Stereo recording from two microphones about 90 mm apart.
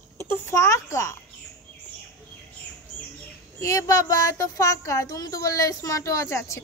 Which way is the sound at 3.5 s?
35° left (ahead or behind).